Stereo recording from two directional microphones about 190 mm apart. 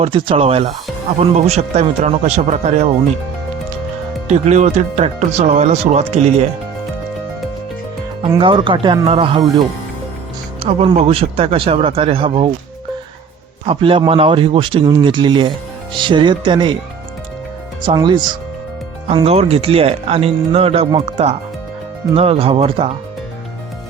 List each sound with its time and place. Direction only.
0.0 s speech: 30° right (ahead or behind)
4.3 s speech: 35° right (ahead or behind)
8.4 s speech: 25° right (ahead or behind)
10.6 s speech: 30° right (ahead or behind)
13.7 s speech: 30° right (ahead or behind)
17.8 s speech: 25° right (ahead or behind)